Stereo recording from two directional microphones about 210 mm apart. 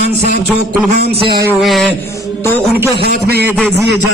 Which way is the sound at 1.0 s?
50° right (ahead or behind).